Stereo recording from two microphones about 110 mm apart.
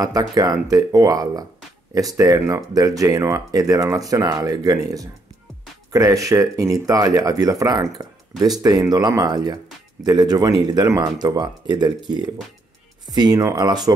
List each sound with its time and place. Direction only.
0.0 s speech: 35° right (ahead or behind)